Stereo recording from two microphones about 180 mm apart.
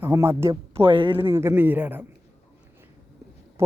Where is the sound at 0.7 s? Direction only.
30° right (ahead or behind).